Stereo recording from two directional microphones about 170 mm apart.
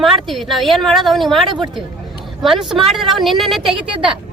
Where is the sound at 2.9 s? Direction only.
Centre (ahead or behind).